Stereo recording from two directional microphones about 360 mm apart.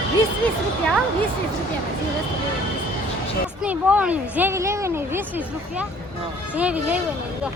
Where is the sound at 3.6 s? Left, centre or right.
Centre.